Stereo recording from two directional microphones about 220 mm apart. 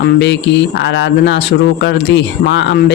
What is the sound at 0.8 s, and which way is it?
Speech, 55° left (ahead or behind).